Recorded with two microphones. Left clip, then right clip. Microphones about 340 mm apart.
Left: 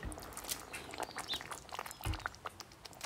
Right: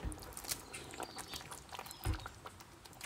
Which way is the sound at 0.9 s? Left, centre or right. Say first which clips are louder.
Left 6 dB; centre.